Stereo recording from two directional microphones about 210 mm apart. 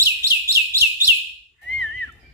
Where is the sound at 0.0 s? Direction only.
10° right (ahead or behind).